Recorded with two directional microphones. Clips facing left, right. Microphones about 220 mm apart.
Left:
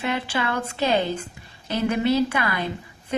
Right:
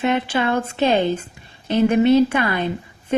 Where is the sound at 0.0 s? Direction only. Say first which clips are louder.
Right 6 dB; 25° right (ahead or behind).